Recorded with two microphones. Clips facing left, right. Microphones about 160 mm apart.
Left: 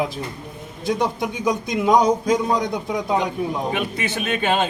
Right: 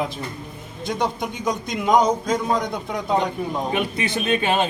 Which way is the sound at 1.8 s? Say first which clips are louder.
Left 1 dB; 10° left (ahead or behind).